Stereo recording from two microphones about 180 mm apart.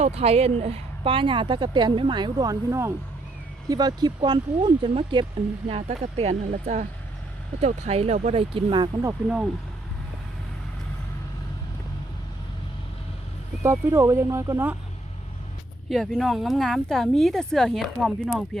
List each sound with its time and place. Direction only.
0.0 s speech: 35° right (ahead or behind)
9.2 s speech: 5° right (ahead or behind)
13.6 s speech: 15° right (ahead or behind)
15.9 s speech: centre (ahead or behind)